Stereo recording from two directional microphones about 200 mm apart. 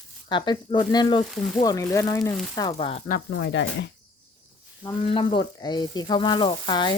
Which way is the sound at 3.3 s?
70° left (ahead or behind).